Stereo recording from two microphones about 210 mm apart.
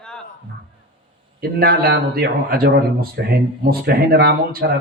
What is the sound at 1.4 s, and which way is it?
A man's voice, 45° right (ahead or behind).